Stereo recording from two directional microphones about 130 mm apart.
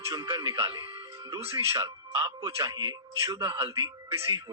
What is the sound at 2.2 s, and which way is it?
A man's voice, 25° right (ahead or behind).